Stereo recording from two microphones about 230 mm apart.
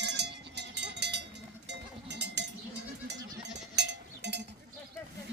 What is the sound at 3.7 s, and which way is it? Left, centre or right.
Cowbell, right.